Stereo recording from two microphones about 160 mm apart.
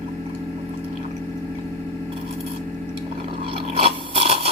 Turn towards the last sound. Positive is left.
turn(degrees=-40)  # may be behind; listen again after turning